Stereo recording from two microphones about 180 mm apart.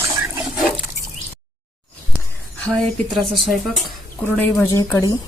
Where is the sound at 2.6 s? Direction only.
Centre (ahead or behind).